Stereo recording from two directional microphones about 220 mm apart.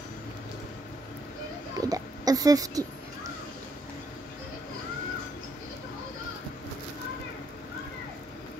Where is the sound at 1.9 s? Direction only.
15° right (ahead or behind).